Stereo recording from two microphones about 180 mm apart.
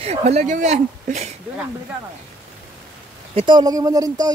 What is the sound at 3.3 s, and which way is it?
Speech, 25° right (ahead or behind).